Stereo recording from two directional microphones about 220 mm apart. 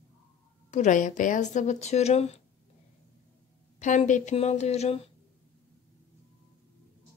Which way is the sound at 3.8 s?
35° left (ahead or behind).